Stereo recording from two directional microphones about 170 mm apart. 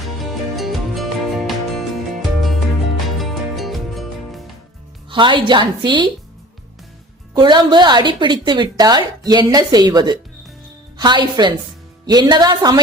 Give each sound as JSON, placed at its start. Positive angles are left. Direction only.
{"t": 0.2, "sound": "music", "side_deg": 0}
{"t": 3.2, "sound": "music", "side_deg": 0}
{"t": 5.0, "sound": "a woman's voice", "side_deg": -30}
{"t": 7.3, "sound": "a woman's voice", "side_deg": -25}